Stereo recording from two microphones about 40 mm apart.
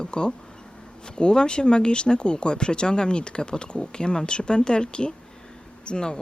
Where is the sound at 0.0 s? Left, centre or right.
Left.